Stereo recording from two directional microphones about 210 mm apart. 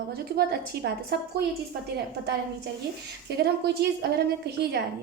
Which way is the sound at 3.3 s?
50° right (ahead or behind).